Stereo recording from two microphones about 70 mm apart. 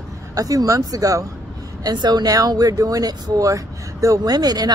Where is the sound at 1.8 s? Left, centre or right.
Right.